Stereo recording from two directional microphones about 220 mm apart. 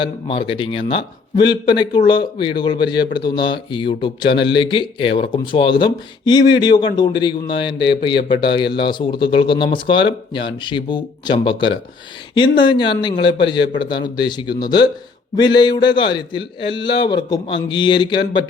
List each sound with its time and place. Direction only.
0.0 s speech: 25° left (ahead or behind)